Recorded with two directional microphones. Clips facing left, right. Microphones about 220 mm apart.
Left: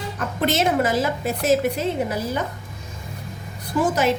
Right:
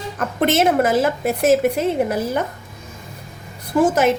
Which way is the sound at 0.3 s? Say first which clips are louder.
Right 4 dB; 55° right (ahead or behind).